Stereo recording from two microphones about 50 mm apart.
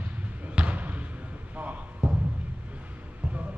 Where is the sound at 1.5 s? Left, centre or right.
Right.